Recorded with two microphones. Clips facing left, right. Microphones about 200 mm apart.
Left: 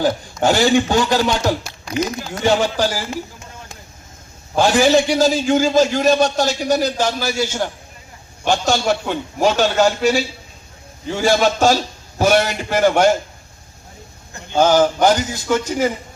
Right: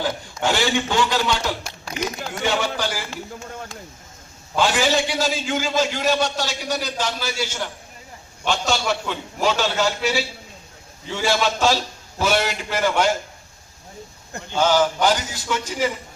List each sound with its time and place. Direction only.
0.0 s a man's voice: 45° left (ahead or behind)
4.5 s a man's voice: 45° left (ahead or behind)
14.5 s a man's voice: 50° left (ahead or behind)